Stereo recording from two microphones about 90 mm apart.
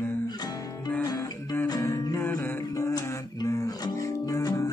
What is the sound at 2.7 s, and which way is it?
Music, 40° left (ahead or behind).